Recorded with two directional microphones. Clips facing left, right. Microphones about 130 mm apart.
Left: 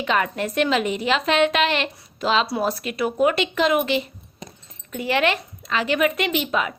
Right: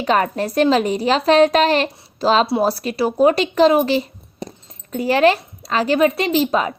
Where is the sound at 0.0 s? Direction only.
40° right (ahead or behind).